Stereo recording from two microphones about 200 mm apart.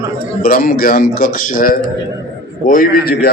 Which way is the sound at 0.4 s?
45° left (ahead or behind).